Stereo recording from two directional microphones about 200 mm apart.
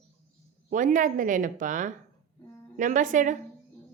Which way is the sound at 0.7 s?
40° right (ahead or behind).